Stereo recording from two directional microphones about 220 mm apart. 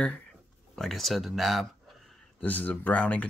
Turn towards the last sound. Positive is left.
turn(degrees=5)  # may be behind; listen again after turning